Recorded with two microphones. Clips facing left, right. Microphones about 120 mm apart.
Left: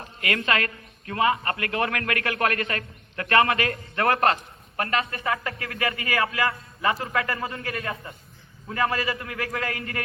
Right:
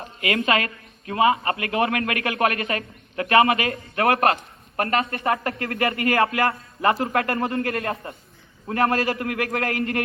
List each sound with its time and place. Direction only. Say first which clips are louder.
0.2 s a man's voice: right 3 dB; 20° right (ahead or behind)
4.8 s a woman's voice: right 4 dB; 50° right (ahead or behind); by 10.0 s 70° right (ahead or behind)